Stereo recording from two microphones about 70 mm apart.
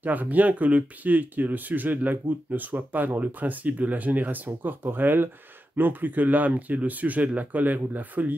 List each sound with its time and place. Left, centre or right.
0.0 s speech: right